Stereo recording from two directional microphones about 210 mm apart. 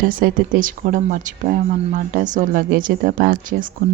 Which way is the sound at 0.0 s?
45° right (ahead or behind).